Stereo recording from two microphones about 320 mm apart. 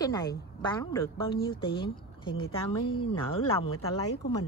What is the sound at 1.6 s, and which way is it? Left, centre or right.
Speech, centre.